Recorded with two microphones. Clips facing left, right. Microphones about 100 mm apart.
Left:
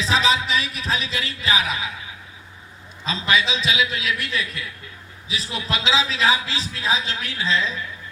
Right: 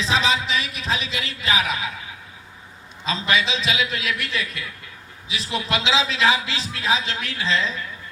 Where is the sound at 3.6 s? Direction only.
40° right (ahead or behind).